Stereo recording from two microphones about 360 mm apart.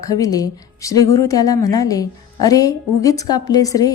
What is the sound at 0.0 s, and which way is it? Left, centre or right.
A woman's voice, centre.